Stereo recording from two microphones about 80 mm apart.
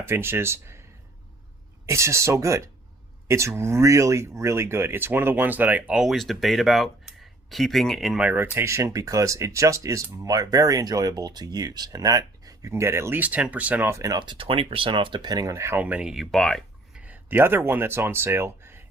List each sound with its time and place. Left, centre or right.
0.0 s speech: right
1.9 s speech: right; by 8.2 s centre
8.2 s speech: right
12.7 s speech: right
13.1 s speech: centre
13.9 s speech: right
14.2 s speech: right
15.5 s speech: right
15.8 s speech: centre
16.2 s speech: centre
17.2 s speech: right